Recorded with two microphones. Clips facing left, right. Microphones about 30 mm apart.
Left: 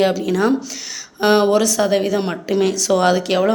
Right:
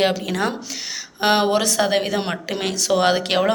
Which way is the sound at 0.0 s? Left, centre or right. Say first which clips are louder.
Left 4 dB; right.